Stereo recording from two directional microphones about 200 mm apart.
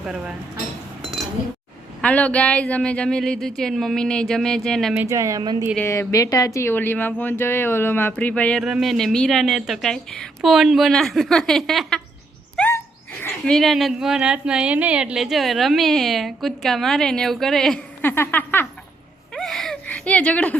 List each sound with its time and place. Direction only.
0.0 s speech: 5° right (ahead or behind)
2.0 s speech: 5° left (ahead or behind)
4.9 s speech: 15° right (ahead or behind)
5.7 s speech: 10° left (ahead or behind)
19.3 s a sound: centre (ahead or behind)